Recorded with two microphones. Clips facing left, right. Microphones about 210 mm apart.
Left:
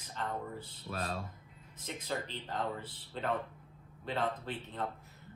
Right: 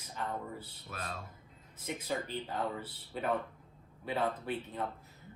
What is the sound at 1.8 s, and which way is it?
Speech, 10° right (ahead or behind).